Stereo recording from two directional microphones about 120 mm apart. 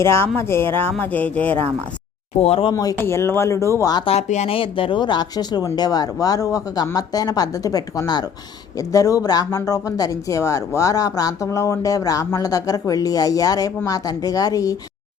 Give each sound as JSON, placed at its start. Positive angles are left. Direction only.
{"t": 0.0, "sound": "speech", "side_deg": 20}
{"t": 2.4, "sound": "speech", "side_deg": 55}
{"t": 2.7, "sound": "speech", "side_deg": 25}
{"t": 4.0, "sound": "speech", "side_deg": 65}